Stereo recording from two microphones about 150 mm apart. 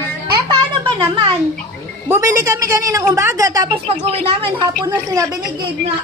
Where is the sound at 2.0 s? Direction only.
20° right (ahead or behind).